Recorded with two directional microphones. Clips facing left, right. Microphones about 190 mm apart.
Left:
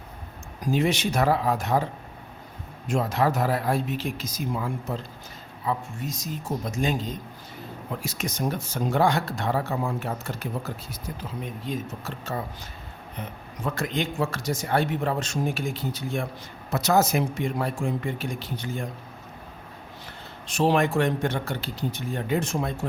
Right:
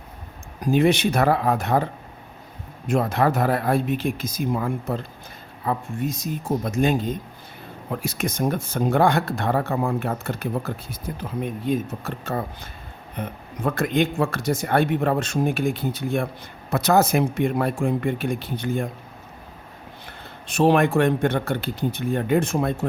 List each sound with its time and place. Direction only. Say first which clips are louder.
0.6 s speech: right 5 dB; 60° right (ahead or behind)
20.1 s speech: right 1 dB; 55° right (ahead or behind)